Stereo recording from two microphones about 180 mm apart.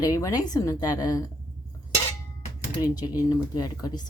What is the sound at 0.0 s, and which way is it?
Speech, 20° left (ahead or behind).